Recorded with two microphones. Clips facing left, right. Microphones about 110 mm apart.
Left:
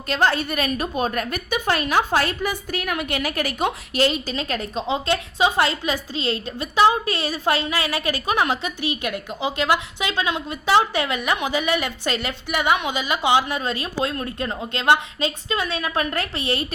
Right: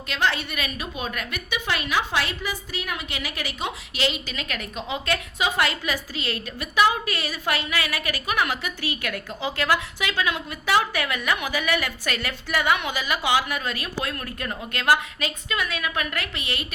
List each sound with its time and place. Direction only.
0.1 s a woman's voice: 40° left (ahead or behind)